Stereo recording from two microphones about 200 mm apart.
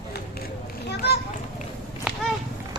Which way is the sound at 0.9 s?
55° left (ahead or behind).